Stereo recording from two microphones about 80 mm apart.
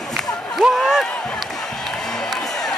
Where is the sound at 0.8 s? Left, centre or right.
Centre.